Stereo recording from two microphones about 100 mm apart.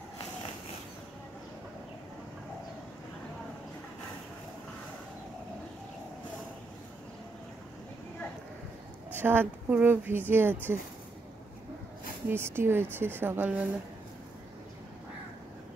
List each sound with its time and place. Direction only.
9.1 s speech: 20° right (ahead or behind)
12.3 s speech: 25° right (ahead or behind)